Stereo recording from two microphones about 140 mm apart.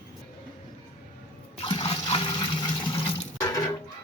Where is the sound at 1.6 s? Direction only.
35° left (ahead or behind).